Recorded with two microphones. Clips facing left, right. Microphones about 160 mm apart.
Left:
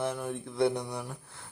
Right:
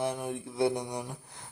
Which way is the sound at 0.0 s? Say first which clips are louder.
Even; 15° right (ahead or behind).